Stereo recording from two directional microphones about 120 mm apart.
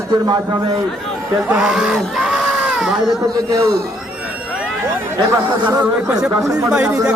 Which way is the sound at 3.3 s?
30° right (ahead or behind).